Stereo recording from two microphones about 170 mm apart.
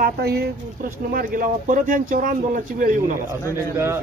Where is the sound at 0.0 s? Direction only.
70° right (ahead or behind); by 3.0 s 50° right (ahead or behind).